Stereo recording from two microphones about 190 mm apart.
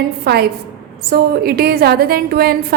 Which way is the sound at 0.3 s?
55° right (ahead or behind).